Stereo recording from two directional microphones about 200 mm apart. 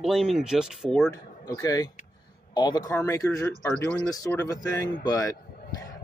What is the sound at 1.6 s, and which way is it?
Speech, 15° left (ahead or behind).